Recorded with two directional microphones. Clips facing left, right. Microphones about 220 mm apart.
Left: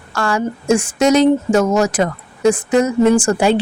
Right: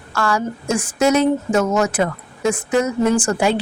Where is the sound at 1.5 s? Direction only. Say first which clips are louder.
Left 3 dB; 30° left (ahead or behind).